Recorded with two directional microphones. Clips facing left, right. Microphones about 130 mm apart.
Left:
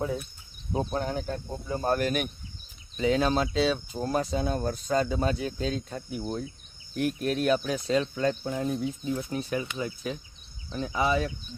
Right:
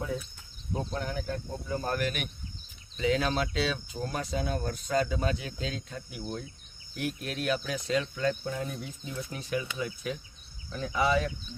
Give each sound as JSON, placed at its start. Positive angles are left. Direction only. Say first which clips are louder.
{"t": 0.7, "sound": "speech", "louder": "left 4 dB", "side_deg": 20}
{"t": 0.9, "sound": "speech", "louder": "left 4 dB", "side_deg": 30}
{"t": 6.2, "sound": "speech", "louder": "left 3 dB", "side_deg": 20}
{"t": 7.0, "sound": "speech", "louder": "left 6 dB", "side_deg": 45}
{"t": 9.1, "sound": "speech", "louder": "left 3 dB", "side_deg": 35}